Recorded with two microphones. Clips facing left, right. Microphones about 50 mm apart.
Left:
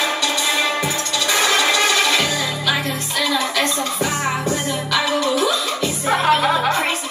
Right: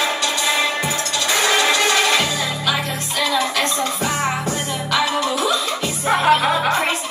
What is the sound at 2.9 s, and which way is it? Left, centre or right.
Music, right.